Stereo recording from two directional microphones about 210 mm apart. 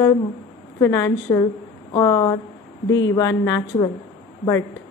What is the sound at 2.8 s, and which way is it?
Speech, 65° left (ahead or behind).